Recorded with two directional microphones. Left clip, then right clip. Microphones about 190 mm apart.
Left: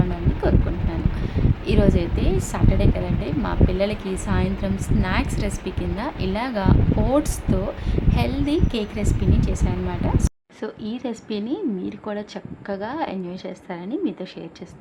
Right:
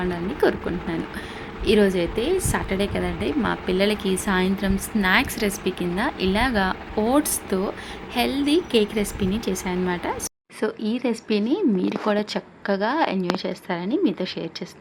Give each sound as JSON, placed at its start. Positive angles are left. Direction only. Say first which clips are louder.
{"t": 0.4, "sound": "a woman's voice", "louder": "right 3 dB", "side_deg": -10}
{"t": 1.6, "sound": "a woman's voice", "louder": "right 3 dB", "side_deg": 0}